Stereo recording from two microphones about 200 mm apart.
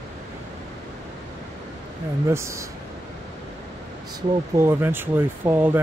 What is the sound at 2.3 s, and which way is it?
Speech, 15° right (ahead or behind).